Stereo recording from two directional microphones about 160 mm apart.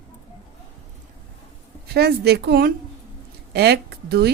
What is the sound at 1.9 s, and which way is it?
A woman's voice, 90° right.